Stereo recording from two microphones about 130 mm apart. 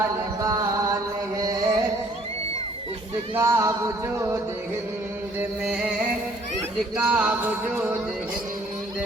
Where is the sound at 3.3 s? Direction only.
25° right (ahead or behind).